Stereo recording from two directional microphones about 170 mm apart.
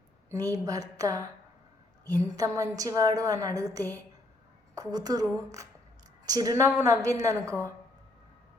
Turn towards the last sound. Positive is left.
turn(degrees=-20)  # may be behind; listen again after turning